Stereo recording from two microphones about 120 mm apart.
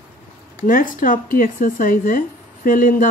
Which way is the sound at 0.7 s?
90° left.